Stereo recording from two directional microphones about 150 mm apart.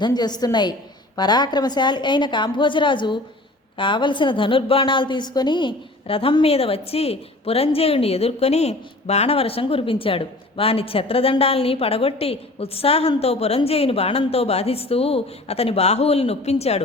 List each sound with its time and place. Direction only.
0.0 s a woman's voice: 30° left (ahead or behind); by 16.8 s 45° left (ahead or behind)